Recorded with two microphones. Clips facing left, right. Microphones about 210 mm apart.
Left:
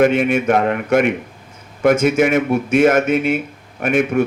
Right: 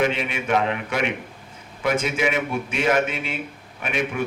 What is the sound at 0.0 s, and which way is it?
A man's voice, 50° left (ahead or behind).